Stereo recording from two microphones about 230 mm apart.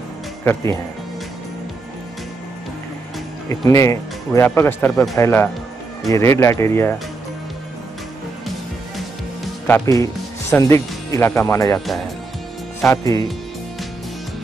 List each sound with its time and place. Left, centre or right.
3.4 s speech: centre
9.7 s speech: centre
12.8 s speech: centre